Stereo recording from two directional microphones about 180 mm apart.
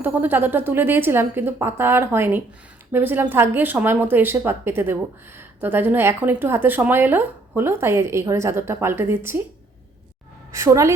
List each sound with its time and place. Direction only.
0.0 s speech: 10° right (ahead or behind)
10.5 s speech: 15° right (ahead or behind)